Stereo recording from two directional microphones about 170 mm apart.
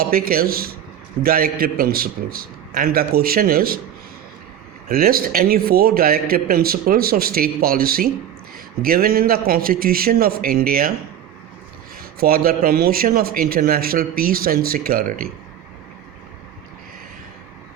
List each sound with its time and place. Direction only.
0.0 s a man's voice: 60° right (ahead or behind)
4.9 s a man's voice: 60° right (ahead or behind)
12.2 s a man's voice: 60° right (ahead or behind)